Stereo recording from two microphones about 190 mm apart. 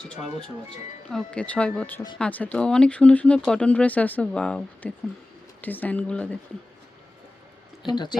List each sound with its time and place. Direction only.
1.1 s speech: 5° left (ahead or behind)
7.9 s speech: 25° left (ahead or behind)